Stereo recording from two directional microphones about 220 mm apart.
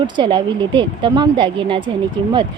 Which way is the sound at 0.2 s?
20° right (ahead or behind).